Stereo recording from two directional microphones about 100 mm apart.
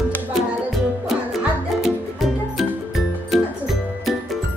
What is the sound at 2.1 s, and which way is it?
Music, centre (ahead or behind).